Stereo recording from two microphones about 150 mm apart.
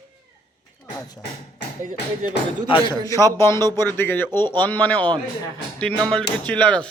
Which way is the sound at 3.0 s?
20° left (ahead or behind).